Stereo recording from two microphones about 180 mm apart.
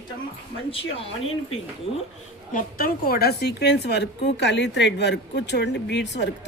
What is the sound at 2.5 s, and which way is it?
A woman's voice, 50° left (ahead or behind).